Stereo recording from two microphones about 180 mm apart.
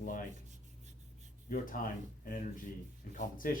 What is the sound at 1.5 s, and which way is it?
Speech, 50° left (ahead or behind).